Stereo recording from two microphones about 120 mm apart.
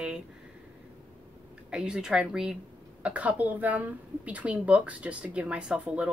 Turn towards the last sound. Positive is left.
turn(degrees=-10)  # may be behind; listen again after turning